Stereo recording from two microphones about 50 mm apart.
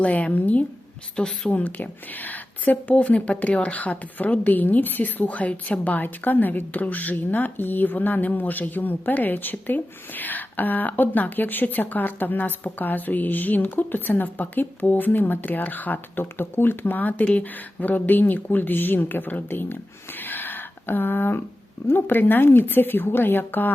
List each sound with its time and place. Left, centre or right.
0.0 s a woman's voice: left